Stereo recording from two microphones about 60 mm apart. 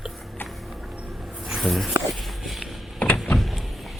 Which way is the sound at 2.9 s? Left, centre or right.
Left.